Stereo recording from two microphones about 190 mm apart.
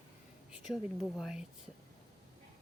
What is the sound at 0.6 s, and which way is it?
Speech, centre (ahead or behind).